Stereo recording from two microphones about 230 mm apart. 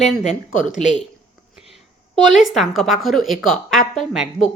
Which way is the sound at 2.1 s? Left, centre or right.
Centre.